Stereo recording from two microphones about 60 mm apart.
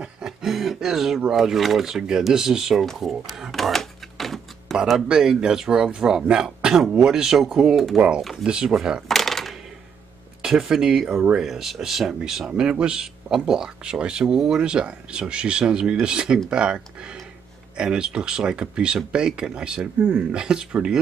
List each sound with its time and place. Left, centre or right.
0.0 s music: centre
1.3 s speech: centre
3.5 s typewriter: centre
5.0 s speech: centre
8.5 s speech: centre
9.0 s a sound: centre
10.6 s speech: centre